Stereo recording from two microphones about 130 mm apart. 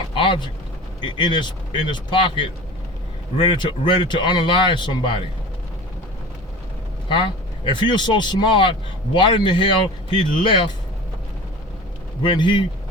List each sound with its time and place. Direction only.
0.2 s vehicle: 40° left (ahead or behind)
1.0 s speech: 40° left (ahead or behind)
7.1 s speech: 40° left (ahead or behind)
12.2 s speech: 35° left (ahead or behind)